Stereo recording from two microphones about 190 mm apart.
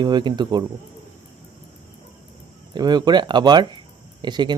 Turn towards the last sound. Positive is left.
turn(degrees=-25)  # may be behind; listen again after turning